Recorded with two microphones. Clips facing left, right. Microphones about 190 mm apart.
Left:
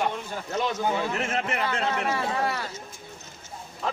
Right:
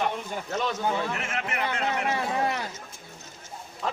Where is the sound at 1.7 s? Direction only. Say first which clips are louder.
Left 1 dB; 20° right (ahead or behind).